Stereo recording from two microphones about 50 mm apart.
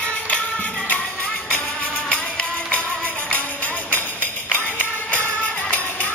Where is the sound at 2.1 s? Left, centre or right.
Left.